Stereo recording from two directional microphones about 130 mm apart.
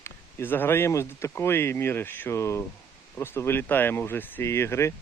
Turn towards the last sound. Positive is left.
turn(degrees=20)  # may be behind; listen again after turning